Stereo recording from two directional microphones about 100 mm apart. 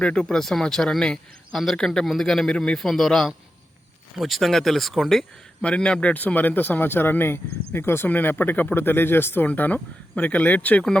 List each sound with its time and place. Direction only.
0.0 s speech: 10° left (ahead or behind)